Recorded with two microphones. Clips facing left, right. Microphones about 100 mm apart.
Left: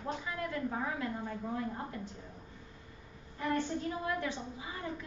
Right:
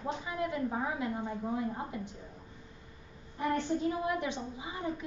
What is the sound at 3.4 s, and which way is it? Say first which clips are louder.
A woman's voice: right 3 dB; 20° right (ahead or behind).